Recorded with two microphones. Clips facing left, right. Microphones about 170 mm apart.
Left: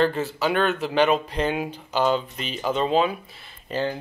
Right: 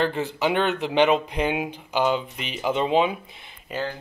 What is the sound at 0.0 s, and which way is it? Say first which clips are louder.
Speech: left 1 dB; 15° right (ahead or behind).